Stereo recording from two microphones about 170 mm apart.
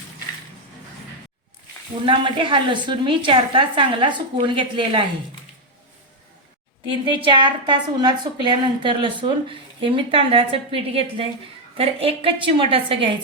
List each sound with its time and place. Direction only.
2.0 s a woman's voice: 30° right (ahead or behind)
6.8 s a woman's voice: 30° right (ahead or behind)